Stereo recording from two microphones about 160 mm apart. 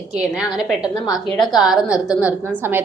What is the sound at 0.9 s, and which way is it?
Speech, 25° left (ahead or behind).